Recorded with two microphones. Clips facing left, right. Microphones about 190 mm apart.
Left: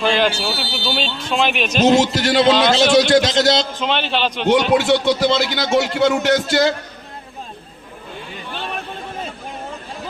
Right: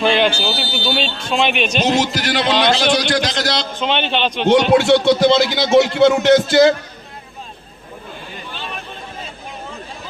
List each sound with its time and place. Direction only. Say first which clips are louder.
0.0 s speech: right 2 dB; centre (ahead or behind)
1.9 s a man's voice: left 3 dB; 25° left (ahead or behind)
3.8 s speech: right 1 dB; centre (ahead or behind)
8.5 s a sound: left 4 dB; 55° left (ahead or behind)